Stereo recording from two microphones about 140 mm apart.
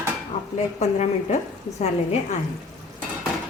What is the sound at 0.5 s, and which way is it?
Speech, 55° left (ahead or behind).